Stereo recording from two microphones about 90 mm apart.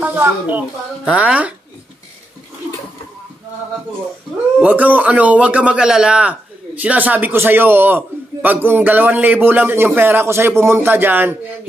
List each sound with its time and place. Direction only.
0.0 s speech: 20° right (ahead or behind)
4.6 s a man's voice: 20° right (ahead or behind)